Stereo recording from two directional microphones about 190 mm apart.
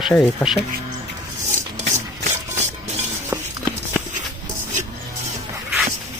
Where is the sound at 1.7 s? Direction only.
40° right (ahead or behind).